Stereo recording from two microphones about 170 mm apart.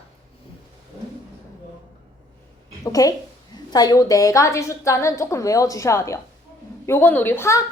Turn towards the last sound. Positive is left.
turn(degrees=15)  # may be behind; listen again after turning